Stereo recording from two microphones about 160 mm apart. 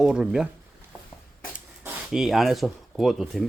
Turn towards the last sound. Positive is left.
turn(degrees=0)  # may be behind; listen again after turning